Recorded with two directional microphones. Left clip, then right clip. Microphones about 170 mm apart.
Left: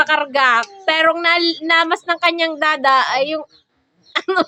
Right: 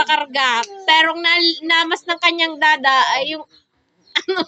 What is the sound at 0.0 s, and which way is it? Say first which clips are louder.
Speech: left 2 dB; 10° left (ahead or behind).